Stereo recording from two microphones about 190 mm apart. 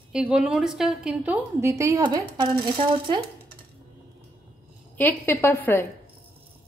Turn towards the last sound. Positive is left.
turn(degrees=10)  # may be behind; listen again after turning